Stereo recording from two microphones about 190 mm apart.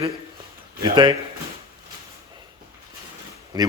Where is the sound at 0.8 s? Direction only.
25° right (ahead or behind).